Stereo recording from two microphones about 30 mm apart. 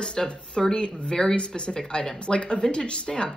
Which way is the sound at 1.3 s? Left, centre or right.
Left.